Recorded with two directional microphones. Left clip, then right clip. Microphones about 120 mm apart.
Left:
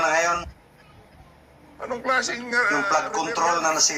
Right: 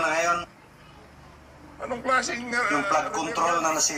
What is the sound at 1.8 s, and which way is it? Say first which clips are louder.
A man's voice: left 1 dB; 20° left (ahead or behind).